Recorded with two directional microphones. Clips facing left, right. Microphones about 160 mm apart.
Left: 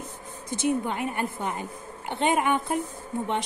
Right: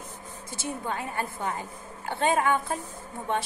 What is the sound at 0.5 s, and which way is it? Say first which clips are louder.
A woman's voice: left 7 dB; 20° left (ahead or behind).